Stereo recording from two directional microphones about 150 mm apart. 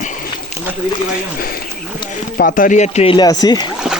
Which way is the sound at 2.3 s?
70° left (ahead or behind).